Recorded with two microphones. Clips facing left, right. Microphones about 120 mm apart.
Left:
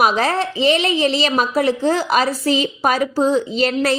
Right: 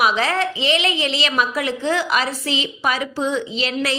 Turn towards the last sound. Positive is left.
turn(degrees=45)  # may be behind; listen again after turning